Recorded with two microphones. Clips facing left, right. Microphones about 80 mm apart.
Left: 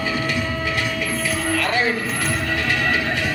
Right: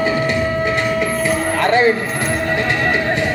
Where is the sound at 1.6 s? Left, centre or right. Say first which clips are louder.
Right 10 dB; right.